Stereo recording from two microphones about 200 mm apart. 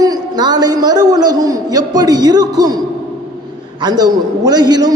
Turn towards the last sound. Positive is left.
turn(degrees=-20)  # may be behind; listen again after turning